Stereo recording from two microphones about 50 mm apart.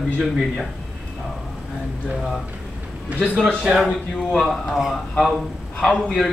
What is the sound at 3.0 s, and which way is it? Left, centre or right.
Speech, right.